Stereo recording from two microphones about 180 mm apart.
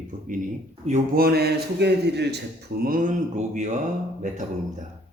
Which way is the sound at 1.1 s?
60° right (ahead or behind).